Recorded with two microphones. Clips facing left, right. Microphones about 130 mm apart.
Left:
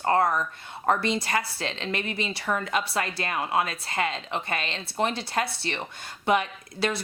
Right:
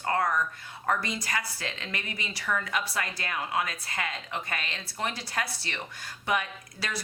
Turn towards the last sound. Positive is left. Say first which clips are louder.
# left 8 dB
turn(degrees=25)  # may be behind; listen again after turning